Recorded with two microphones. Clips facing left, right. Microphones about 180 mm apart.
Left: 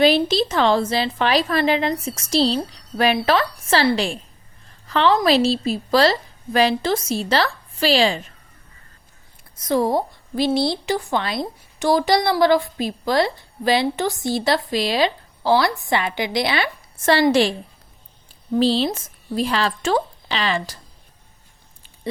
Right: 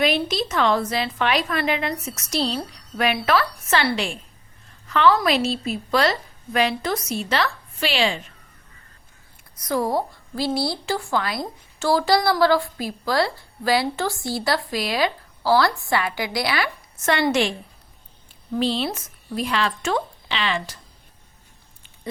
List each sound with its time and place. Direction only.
0.2 s a woman's voice: 30° left (ahead or behind)
9.6 s a woman's voice: 25° left (ahead or behind)
18.6 s speech: 30° left (ahead or behind)